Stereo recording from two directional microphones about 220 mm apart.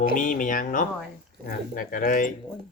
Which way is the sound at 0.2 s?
35° left (ahead or behind).